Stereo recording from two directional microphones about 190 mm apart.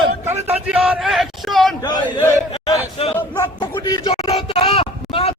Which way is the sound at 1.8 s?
20° left (ahead or behind).